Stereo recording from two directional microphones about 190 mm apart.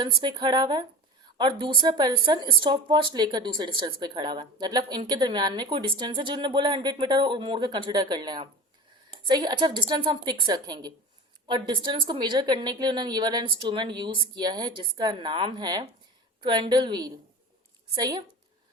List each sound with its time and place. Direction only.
0.0 s speech: 25° right (ahead or behind)